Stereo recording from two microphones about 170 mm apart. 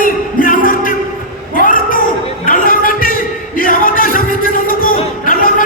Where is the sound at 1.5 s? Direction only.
55° left (ahead or behind).